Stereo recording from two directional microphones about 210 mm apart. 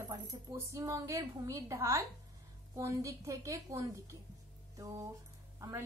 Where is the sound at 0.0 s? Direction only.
15° right (ahead or behind).